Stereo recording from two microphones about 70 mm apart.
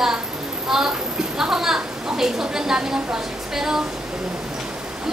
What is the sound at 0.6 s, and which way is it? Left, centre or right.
A woman's voice, centre.